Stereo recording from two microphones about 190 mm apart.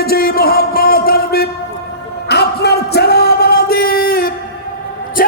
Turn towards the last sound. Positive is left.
turn(degrees=50)  # may be behind; listen again after turning